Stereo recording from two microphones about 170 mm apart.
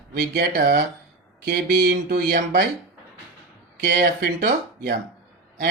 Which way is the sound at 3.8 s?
70° right (ahead or behind).